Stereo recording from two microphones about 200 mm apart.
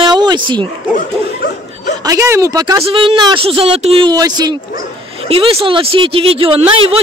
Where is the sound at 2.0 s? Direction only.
15° right (ahead or behind).